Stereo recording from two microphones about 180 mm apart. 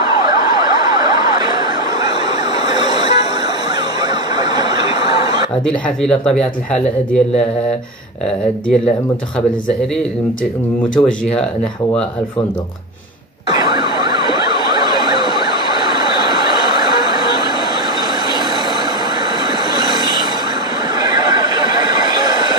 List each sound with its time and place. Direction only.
0.0 s emergency vehicle: 25° right (ahead or behind)
4.4 s snicker: 20° right (ahead or behind)
5.7 s speech: 5° left (ahead or behind)
11.0 s speech: 5° left (ahead or behind)
13.5 s emergency vehicle: 25° right (ahead or behind)
19.7 s train: 25° right (ahead or behind)
21.0 s neigh: 25° right (ahead or behind)